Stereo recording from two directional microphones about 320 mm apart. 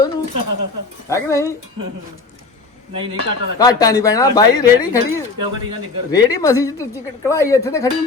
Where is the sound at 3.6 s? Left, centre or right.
Centre.